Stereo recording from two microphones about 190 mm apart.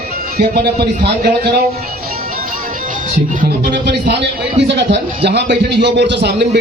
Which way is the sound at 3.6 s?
65° right (ahead or behind).